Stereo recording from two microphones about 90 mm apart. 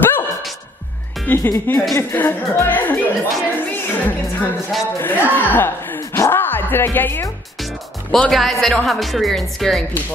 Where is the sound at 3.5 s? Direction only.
20° left (ahead or behind).